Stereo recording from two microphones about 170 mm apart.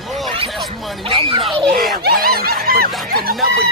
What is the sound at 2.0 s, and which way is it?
Snicker, 65° right (ahead or behind).